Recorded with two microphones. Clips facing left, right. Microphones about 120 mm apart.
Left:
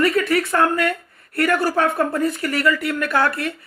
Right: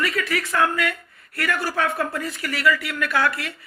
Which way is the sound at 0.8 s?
50° left (ahead or behind).